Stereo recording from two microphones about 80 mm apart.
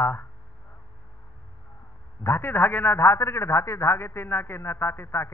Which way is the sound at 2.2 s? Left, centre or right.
Left.